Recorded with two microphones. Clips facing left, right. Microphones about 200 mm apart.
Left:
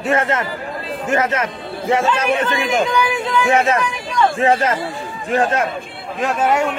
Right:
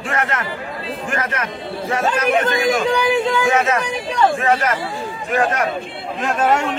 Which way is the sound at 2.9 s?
30° right (ahead or behind).